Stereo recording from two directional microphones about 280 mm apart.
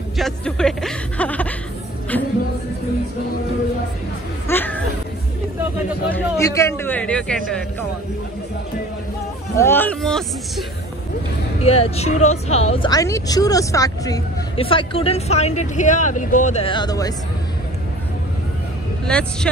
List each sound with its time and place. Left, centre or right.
0.2 s music: centre
4.5 s music: centre
6.1 s speech: centre
9.6 s speech: centre
11.6 s a woman's voice: left
19.0 s speech: centre